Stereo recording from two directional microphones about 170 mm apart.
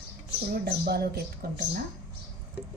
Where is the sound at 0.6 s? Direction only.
65° right (ahead or behind).